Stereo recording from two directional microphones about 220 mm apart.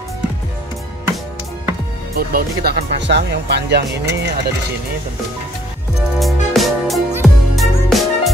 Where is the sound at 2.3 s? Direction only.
45° right (ahead or behind).